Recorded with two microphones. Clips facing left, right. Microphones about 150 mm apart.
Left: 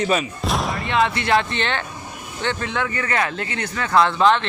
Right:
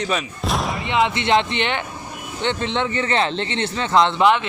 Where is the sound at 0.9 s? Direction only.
20° right (ahead or behind).